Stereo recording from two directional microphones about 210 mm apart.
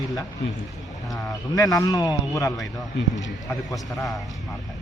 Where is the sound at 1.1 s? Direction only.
15° left (ahead or behind).